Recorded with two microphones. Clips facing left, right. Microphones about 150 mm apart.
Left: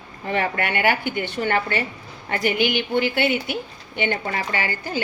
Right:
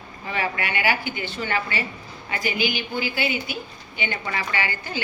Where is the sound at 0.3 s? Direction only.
55° left (ahead or behind).